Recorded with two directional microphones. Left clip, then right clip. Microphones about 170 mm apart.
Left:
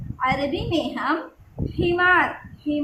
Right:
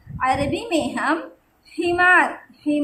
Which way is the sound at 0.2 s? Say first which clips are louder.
Right 2 dB; 35° right (ahead or behind).